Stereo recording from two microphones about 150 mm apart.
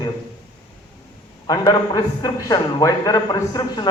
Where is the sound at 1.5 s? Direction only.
25° left (ahead or behind).